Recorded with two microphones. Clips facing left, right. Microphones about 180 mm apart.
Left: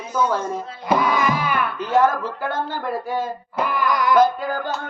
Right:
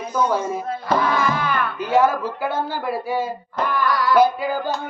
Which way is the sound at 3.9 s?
20° left (ahead or behind).